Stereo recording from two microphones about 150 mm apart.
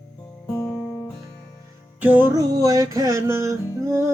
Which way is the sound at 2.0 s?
10° right (ahead or behind).